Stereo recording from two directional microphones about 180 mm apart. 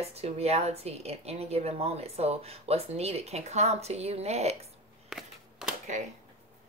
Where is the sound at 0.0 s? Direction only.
35° right (ahead or behind).